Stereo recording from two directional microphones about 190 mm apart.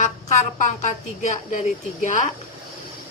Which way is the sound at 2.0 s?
40° left (ahead or behind).